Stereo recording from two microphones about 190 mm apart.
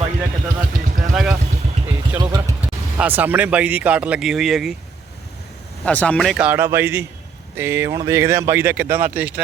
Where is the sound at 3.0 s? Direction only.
10° right (ahead or behind).